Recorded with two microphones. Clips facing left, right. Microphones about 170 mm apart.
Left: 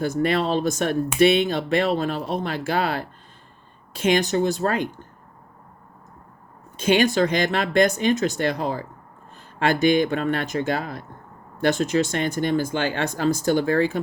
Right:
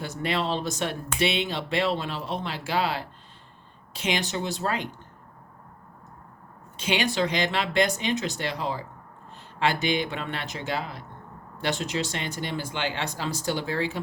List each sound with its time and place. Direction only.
0.0 s speech: 45° left (ahead or behind)
6.7 s speech: 45° left (ahead or behind)